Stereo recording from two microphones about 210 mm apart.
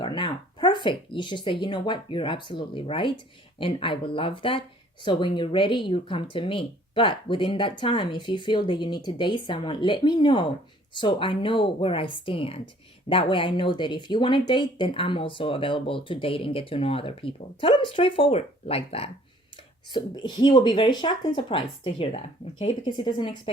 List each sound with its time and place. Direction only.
0.0 s speech: 20° left (ahead or behind)